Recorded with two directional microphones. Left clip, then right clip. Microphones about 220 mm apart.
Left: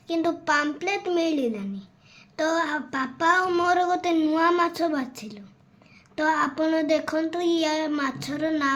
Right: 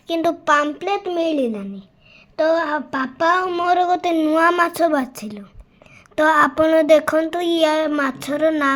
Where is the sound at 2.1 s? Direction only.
10° right (ahead or behind).